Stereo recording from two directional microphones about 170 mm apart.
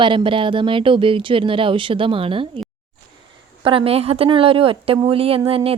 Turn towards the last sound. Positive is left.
turn(degrees=-35)  # may be behind; listen again after turning